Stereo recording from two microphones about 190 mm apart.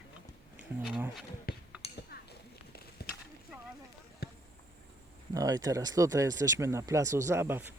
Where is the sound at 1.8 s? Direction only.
30° left (ahead or behind).